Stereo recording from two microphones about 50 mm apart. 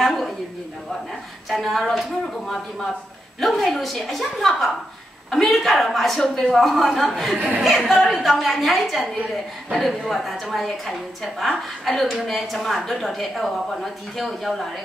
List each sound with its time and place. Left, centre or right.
0.0 s a sound: centre
1.5 s a woman's voice: centre
7.3 s speech: right
7.6 s a woman's voice: centre